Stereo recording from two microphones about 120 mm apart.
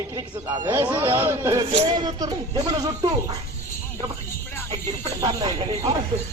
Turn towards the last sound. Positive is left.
turn(degrees=-35)  # may be behind; listen again after turning